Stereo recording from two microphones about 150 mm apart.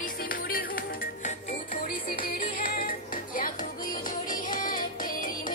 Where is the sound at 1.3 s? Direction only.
60° left (ahead or behind).